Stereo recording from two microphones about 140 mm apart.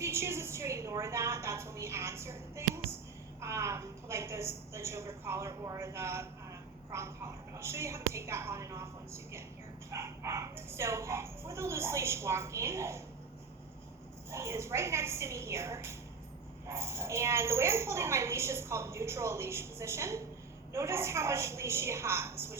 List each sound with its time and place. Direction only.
0.0 s a woman's voice: 20° right (ahead or behind)
14.3 s a woman's voice: 20° right (ahead or behind)